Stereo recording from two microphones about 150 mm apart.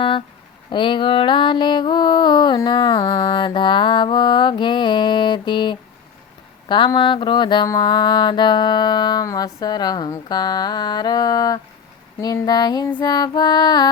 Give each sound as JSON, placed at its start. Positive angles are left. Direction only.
{"t": 0.7, "sound": "mantra", "side_deg": 30}